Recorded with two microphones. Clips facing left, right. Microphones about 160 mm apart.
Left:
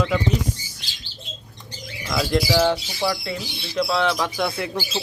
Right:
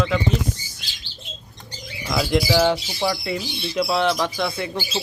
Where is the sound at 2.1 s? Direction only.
5° right (ahead or behind).